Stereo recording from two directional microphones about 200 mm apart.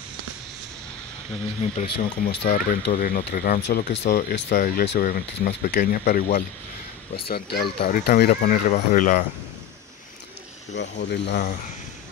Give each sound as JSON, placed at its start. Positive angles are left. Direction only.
{"t": 1.6, "sound": "speech", "side_deg": 40}
{"t": 3.6, "sound": "speech", "side_deg": 60}
{"t": 10.7, "sound": "speech", "side_deg": 60}